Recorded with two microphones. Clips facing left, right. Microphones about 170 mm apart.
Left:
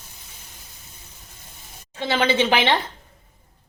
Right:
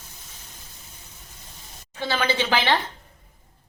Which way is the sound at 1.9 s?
20° left (ahead or behind).